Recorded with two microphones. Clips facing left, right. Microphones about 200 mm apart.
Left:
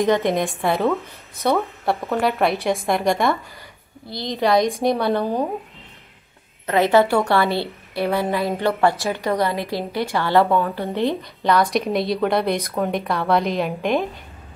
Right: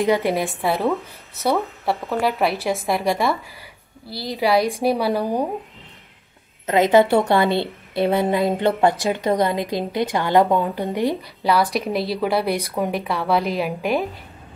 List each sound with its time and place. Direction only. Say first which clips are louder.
0.0 s a woman's voice: left 1 dB; 10° right (ahead or behind)
4.4 s a woman's voice: left 1 dB; 5° right (ahead or behind)
6.6 s a woman's voice: right 1 dB; 20° right (ahead or behind)